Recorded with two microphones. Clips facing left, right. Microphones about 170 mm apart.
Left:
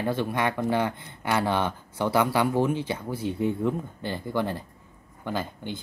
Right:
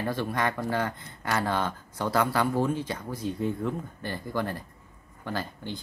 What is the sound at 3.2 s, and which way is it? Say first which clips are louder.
Speech: left 3 dB; 20° left (ahead or behind).